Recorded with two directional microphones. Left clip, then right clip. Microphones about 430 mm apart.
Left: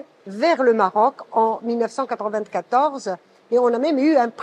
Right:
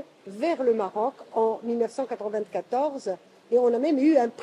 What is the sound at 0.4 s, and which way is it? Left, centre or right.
Speech, left.